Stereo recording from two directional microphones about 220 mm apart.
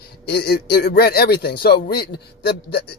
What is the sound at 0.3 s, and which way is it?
A man's voice, 45° left (ahead or behind).